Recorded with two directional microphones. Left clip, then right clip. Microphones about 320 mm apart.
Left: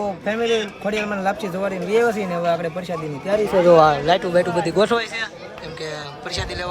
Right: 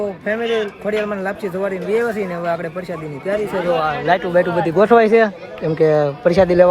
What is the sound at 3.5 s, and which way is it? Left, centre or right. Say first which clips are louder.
Speech: left 8 dB; centre.